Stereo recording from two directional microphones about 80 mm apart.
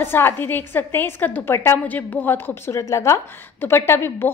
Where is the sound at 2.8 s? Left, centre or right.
Left.